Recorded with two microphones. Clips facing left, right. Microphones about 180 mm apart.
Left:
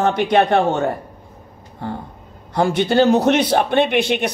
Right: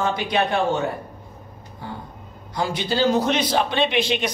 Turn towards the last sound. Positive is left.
turn(degrees=55)  # may be behind; listen again after turning